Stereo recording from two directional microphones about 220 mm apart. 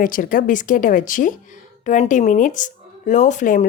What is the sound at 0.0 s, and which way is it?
Speech, 40° left (ahead or behind).